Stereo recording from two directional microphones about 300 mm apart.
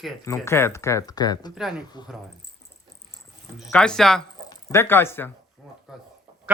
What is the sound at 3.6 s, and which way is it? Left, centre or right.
Speech, centre.